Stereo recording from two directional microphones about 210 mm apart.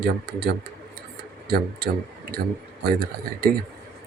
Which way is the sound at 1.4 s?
45° right (ahead or behind).